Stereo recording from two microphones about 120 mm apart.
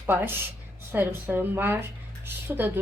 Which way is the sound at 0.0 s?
20° right (ahead or behind).